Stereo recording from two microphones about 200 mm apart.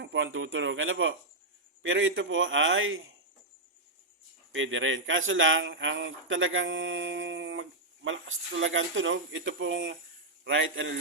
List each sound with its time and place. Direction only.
0.0 s speech: 70° right (ahead or behind)
4.5 s speech: 75° right (ahead or behind)